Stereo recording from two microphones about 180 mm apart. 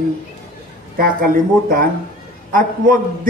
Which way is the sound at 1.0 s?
55° right (ahead or behind).